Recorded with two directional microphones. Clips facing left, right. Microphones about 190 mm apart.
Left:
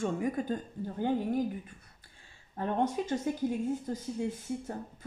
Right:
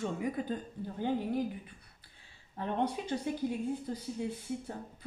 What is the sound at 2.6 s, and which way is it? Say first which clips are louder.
Speech: left 3 dB; 45° left (ahead or behind).